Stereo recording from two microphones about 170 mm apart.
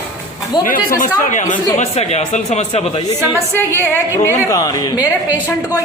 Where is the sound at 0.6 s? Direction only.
55° left (ahead or behind).